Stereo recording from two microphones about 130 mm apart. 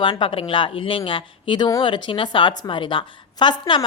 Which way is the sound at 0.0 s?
40° left (ahead or behind).